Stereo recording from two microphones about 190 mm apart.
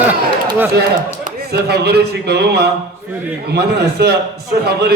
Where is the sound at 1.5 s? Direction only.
60° right (ahead or behind).